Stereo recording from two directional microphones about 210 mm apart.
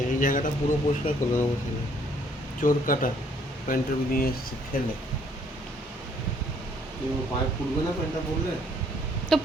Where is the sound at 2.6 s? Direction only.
40° left (ahead or behind).